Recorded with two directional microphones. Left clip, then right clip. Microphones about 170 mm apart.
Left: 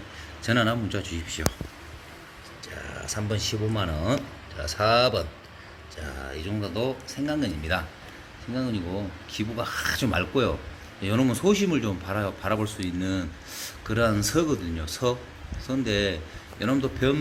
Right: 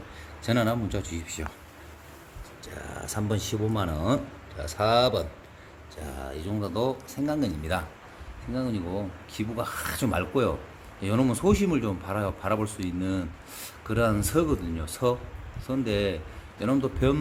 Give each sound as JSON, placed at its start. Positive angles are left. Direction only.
{"t": 0.4, "sound": "speech", "side_deg": -15}
{"t": 2.7, "sound": "speech", "side_deg": -30}
{"t": 3.7, "sound": "a man's voice", "side_deg": -15}